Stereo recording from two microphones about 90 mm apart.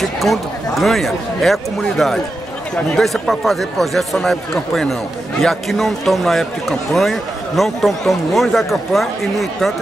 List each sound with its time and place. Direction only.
0.0 s speech: centre (ahead or behind)